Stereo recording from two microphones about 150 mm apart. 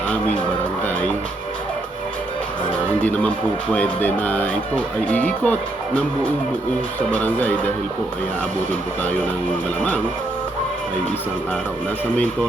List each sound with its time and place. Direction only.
3.0 s speech: 10° left (ahead or behind)